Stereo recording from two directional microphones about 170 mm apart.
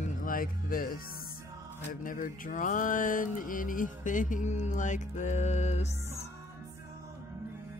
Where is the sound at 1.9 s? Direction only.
55° left (ahead or behind).